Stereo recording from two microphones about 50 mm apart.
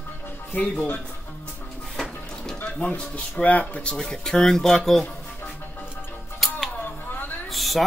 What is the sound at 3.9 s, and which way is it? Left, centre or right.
Speech, centre.